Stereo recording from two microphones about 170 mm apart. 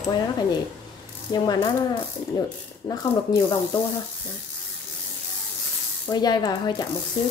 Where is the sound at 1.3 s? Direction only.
25° left (ahead or behind).